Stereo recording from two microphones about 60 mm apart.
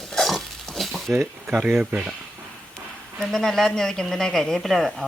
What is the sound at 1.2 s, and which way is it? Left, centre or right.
Speech, centre.